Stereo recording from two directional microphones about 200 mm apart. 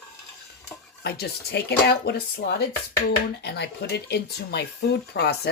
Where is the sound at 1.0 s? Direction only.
50° left (ahead or behind).